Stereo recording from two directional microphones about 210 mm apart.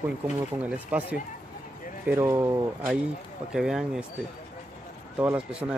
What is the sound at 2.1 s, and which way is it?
Speech, 10° right (ahead or behind).